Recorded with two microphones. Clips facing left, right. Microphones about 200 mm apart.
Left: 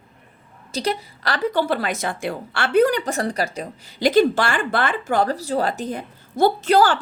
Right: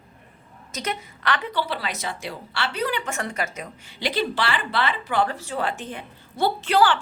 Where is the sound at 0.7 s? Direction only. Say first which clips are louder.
Left 6 dB; 35° left (ahead or behind).